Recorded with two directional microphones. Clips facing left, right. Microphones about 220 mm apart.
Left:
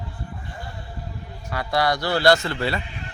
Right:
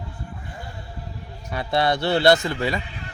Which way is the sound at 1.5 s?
20° right (ahead or behind).